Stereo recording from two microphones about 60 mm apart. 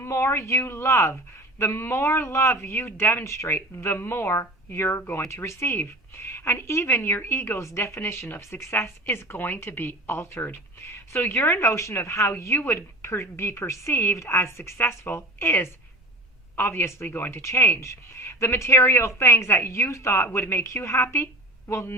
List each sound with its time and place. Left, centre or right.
0.0 s speech: left
7.6 s speech: left
17.4 s speech: left